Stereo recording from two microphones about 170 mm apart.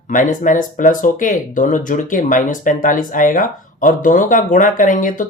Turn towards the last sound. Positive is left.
turn(degrees=50)  # may be behind; listen again after turning